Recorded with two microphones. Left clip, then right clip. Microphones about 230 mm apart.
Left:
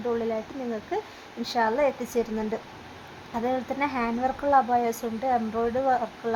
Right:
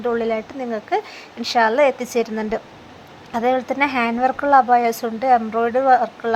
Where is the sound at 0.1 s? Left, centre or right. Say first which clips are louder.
Right 5 dB; right.